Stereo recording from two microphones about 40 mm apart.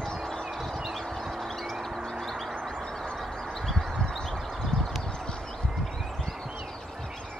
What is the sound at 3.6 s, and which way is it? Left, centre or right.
Bird, centre.